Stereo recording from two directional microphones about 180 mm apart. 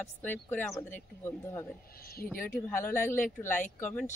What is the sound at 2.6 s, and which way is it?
Speech, 10° left (ahead or behind).